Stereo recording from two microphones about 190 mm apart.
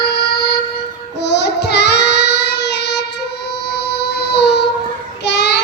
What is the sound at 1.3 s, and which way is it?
Child singing, 65° left (ahead or behind).